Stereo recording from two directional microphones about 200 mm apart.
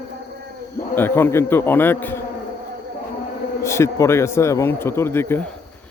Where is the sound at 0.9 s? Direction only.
10° left (ahead or behind).